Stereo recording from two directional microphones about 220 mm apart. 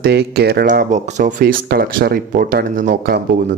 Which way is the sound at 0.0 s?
45° right (ahead or behind).